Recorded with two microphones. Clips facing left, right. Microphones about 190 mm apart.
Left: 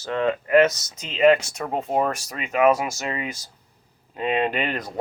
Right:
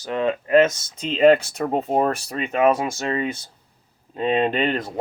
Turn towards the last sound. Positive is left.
turn(degrees=-25)  # may be behind; listen again after turning